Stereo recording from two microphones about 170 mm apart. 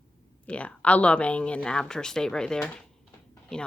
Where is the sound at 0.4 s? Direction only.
5° left (ahead or behind).